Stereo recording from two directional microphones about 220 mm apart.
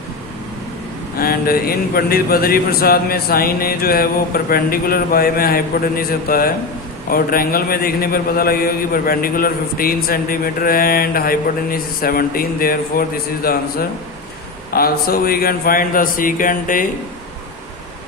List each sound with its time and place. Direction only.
1.2 s a man's voice: 40° left (ahead or behind)